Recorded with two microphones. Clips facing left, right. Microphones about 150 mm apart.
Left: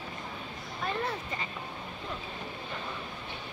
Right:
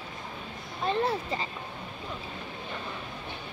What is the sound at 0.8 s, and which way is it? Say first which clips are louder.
Speech: right 6 dB; 30° right (ahead or behind).